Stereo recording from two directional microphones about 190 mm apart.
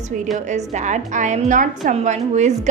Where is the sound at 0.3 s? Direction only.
40° right (ahead or behind).